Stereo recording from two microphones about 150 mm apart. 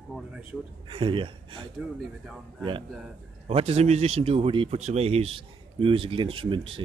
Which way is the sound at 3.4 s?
40° right (ahead or behind).